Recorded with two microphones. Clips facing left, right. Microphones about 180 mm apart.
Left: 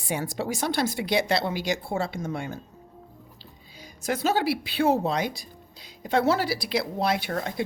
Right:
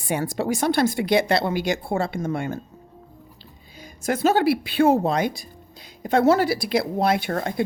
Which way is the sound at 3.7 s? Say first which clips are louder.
Right 4 dB; 50° right (ahead or behind).